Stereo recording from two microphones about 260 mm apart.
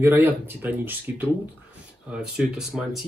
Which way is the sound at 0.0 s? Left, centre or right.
Centre.